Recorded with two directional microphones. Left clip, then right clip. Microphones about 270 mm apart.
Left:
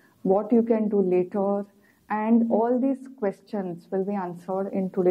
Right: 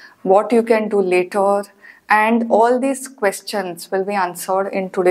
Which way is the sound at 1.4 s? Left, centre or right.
Centre.